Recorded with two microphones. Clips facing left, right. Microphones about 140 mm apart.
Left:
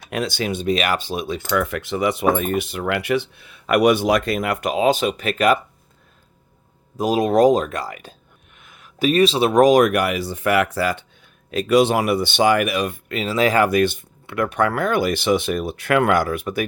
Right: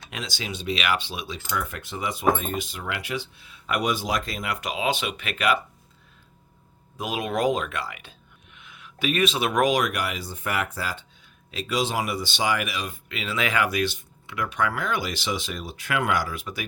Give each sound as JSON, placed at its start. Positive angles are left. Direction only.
{"t": 0.1, "sound": "speech", "side_deg": 55}
{"t": 1.5, "sound": "speech", "side_deg": 75}
{"t": 6.9, "sound": "speech", "side_deg": 40}
{"t": 11.5, "sound": "speech", "side_deg": 55}
{"t": 13.1, "sound": "speech", "side_deg": 40}